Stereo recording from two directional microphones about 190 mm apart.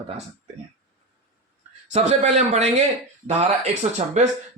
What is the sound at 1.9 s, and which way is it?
Speech, 35° right (ahead or behind).